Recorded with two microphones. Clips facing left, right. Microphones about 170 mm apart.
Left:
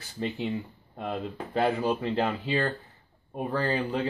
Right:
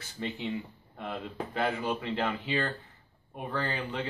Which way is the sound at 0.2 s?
30° left (ahead or behind).